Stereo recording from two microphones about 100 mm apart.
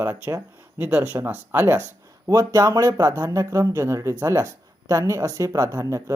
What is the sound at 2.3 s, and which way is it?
Speech, 35° right (ahead or behind).